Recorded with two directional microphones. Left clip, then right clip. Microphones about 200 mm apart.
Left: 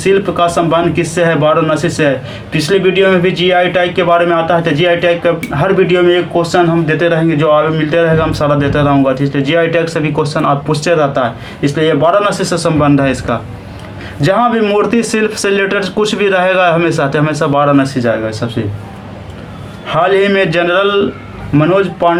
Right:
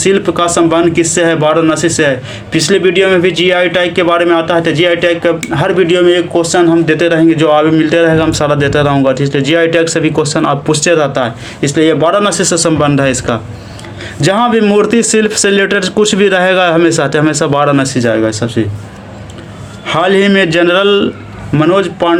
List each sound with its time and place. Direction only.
0.0 s speech: 40° right (ahead or behind)
19.9 s speech: 45° right (ahead or behind)